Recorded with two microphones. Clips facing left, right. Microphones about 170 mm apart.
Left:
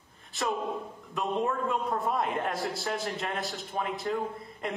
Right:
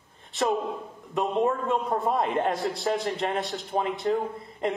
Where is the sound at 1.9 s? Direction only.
30° right (ahead or behind).